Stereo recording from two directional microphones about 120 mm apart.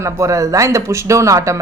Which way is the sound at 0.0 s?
25° right (ahead or behind).